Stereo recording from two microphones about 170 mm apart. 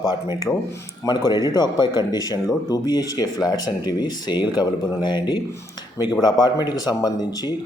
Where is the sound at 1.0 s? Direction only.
25° left (ahead or behind).